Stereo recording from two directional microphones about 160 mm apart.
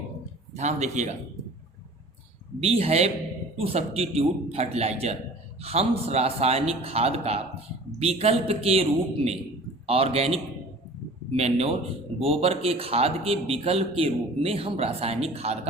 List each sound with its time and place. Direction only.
0.5 s speech: 45° right (ahead or behind)
2.6 s a man's voice: 40° right (ahead or behind)